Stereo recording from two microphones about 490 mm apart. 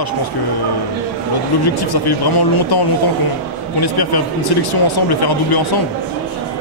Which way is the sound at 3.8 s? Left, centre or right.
Left.